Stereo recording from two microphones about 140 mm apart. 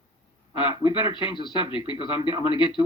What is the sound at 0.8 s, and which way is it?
Speech, 35° left (ahead or behind).